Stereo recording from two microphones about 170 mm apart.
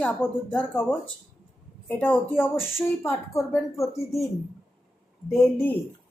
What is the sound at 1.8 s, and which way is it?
Speech, 10° left (ahead or behind).